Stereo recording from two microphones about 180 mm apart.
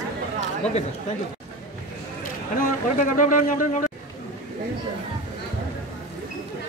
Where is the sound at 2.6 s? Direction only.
45° left (ahead or behind).